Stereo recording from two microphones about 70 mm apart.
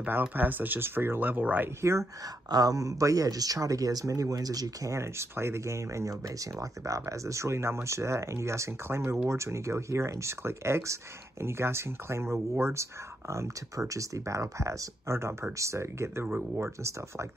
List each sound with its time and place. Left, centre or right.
0.0 s speech: right
1.8 s speech: right
2.5 s speech: right
4.9 s speech: right